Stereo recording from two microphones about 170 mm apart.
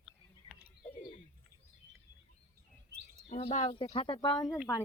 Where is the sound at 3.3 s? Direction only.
40° left (ahead or behind); by 4.5 s 25° left (ahead or behind).